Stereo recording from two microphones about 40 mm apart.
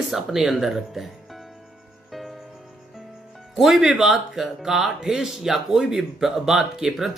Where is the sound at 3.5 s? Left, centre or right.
Centre.